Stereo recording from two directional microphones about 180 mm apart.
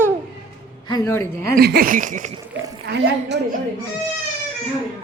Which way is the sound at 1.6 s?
55° right (ahead or behind).